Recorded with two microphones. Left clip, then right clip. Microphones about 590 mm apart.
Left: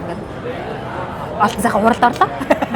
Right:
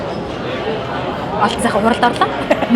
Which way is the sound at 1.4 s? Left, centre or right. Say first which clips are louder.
Left 1 dB; left.